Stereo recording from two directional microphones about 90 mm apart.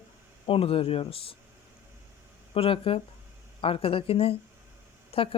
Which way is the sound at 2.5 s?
85° left.